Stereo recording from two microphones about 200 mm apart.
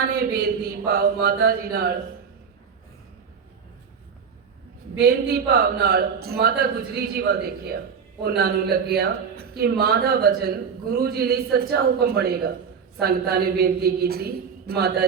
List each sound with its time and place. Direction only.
0.2 s speech: 50° right (ahead or behind)
4.9 s speech: 50° right (ahead or behind)